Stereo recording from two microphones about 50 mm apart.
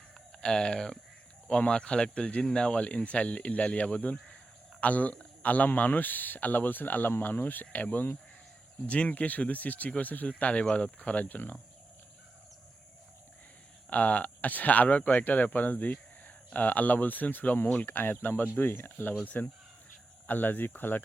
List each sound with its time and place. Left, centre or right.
0.4 s speech: centre
11.0 s speech: left
13.9 s speech: left